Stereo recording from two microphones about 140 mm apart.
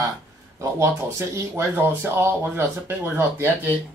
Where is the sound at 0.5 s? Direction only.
20° right (ahead or behind).